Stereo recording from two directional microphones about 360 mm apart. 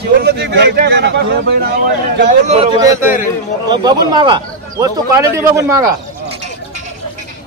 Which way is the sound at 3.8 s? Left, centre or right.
Centre.